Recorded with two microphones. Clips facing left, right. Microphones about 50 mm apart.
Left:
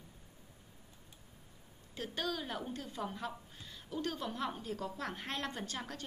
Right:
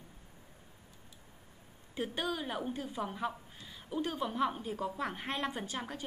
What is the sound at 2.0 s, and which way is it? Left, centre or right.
A woman's voice, centre.